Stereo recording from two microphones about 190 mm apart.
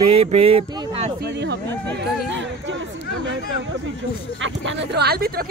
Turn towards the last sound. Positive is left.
turn(degrees=-55)  # may be behind; listen again after turning